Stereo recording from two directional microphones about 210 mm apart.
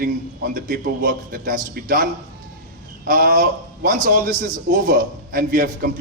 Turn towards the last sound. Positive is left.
turn(degrees=-45)  # may be behind; listen again after turning